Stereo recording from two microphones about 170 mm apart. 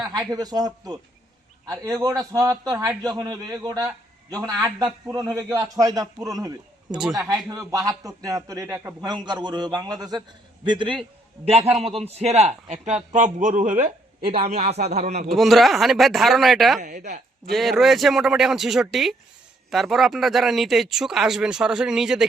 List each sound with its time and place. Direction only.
0.0 s a man's voice: 20° right (ahead or behind)
6.9 s speech: 5° right (ahead or behind)
7.3 s a man's voice: 20° right (ahead or behind); by 14.7 s 60° right (ahead or behind)
14.8 s speech: 40° right (ahead or behind)
15.4 s speech: centre (ahead or behind)
16.8 s speech: 45° right (ahead or behind)
17.5 s speech: centre (ahead or behind)